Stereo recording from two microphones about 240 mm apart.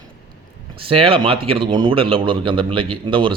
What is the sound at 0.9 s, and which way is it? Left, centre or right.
Speech, right.